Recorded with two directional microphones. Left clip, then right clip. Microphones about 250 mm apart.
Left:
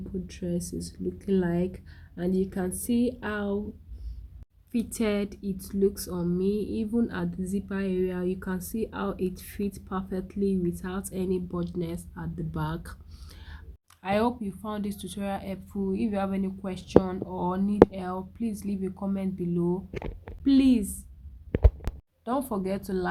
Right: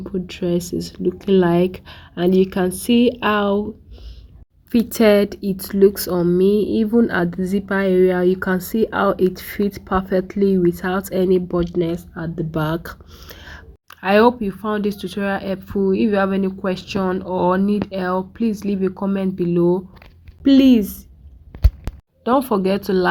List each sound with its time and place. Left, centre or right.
0.0 s speech: right
4.7 s speech: centre
22.2 s speech: centre